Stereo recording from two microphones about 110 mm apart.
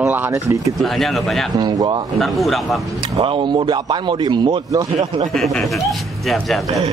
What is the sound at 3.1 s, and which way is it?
Speech, 60° right (ahead or behind).